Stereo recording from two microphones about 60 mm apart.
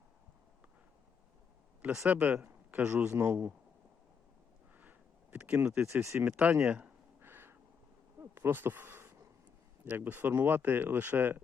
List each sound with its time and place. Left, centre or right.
2.0 s speech: right
3.1 s a man's voice: right
4.8 s a sound: right
5.5 s a man's voice: right
6.2 s speech: right
7.2 s crow: right
8.2 s insect: right
9.8 s speech: right